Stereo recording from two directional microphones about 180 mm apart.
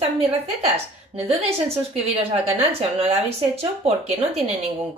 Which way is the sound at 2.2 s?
35° right (ahead or behind).